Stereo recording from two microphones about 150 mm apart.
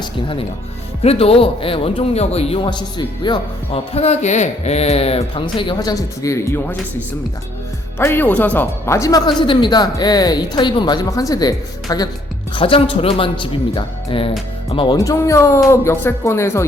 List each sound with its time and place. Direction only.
0.0 s speech: 35° left (ahead or behind)
3.9 s speech: 45° left (ahead or behind)
5.9 s speech: 20° left (ahead or behind)
7.9 s speech: 15° left (ahead or behind)
12.5 s speech: 35° left (ahead or behind)
14.9 s speech: 20° left (ahead or behind)